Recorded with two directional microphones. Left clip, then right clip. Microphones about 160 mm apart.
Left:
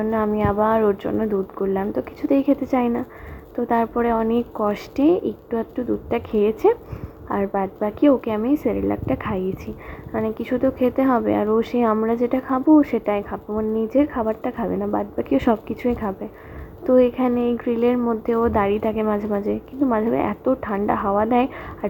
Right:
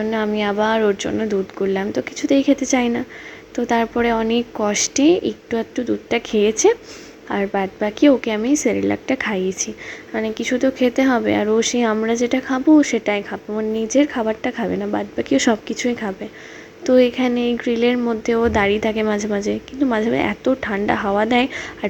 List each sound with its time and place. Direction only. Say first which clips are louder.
0.0 s a woman's voice: right 1 dB; 30° right (ahead or behind)
2.0 s speech: right 4 dB; 20° right (ahead or behind)
2.7 s a woman's voice: right 2 dB; 35° right (ahead or behind)